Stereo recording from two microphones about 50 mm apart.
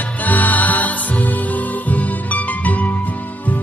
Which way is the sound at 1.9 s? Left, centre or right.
Left.